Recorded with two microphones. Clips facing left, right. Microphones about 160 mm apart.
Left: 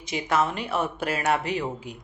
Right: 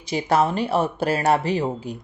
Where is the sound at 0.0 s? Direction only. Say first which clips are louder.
Right 5 dB; 35° right (ahead or behind).